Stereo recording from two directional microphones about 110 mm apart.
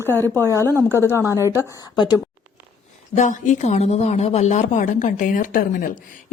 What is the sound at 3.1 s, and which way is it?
A woman's voice, 90° left.